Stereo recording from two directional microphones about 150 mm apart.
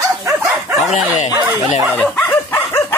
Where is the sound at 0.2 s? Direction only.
15° right (ahead or behind).